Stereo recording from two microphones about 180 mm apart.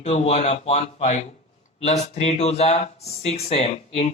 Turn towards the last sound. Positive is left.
turn(degrees=35)  # may be behind; listen again after turning